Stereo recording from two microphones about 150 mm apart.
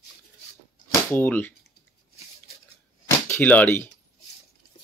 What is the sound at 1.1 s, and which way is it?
Speech, 10° left (ahead or behind).